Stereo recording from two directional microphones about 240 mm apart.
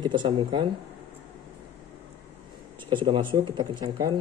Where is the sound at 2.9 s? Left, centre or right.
Right.